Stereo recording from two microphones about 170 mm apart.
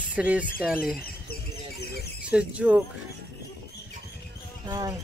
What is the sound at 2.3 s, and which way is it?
Speech, 5° right (ahead or behind).